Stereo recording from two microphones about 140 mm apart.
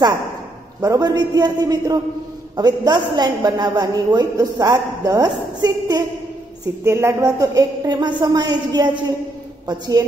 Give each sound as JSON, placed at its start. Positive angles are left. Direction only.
{"t": 0.7, "sound": "a man's voice", "side_deg": -25}